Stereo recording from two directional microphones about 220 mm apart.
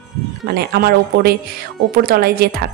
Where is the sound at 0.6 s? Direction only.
45° right (ahead or behind).